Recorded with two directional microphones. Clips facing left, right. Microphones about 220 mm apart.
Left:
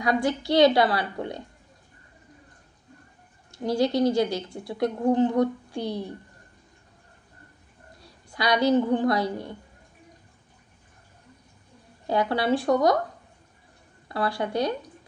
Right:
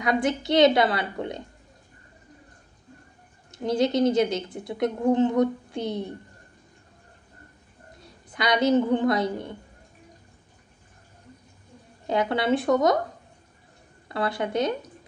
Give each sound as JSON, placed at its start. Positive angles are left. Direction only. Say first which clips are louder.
{"t": 0.0, "sound": "a woman's voice", "louder": "even", "side_deg": -20}
{"t": 3.5, "sound": "a woman's voice", "louder": "right 1 dB", "side_deg": -20}
{"t": 8.0, "sound": "a woman's voice", "louder": "even", "side_deg": -20}
{"t": 12.1, "sound": "a woman's voice", "louder": "even", "side_deg": -20}
{"t": 14.0, "sound": "a woman's voice", "louder": "even", "side_deg": -20}